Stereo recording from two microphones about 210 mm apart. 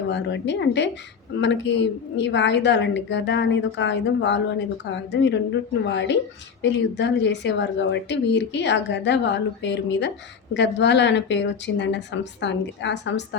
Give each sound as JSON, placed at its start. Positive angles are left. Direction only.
{"t": 0.1, "sound": "a woman's voice", "side_deg": 55}